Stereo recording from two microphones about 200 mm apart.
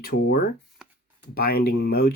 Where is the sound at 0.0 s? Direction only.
50° left (ahead or behind).